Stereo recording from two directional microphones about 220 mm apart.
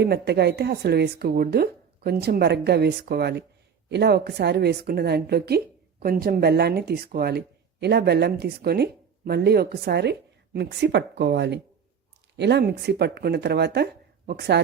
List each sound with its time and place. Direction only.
0.0 s a woman's voice: 45° right (ahead or behind)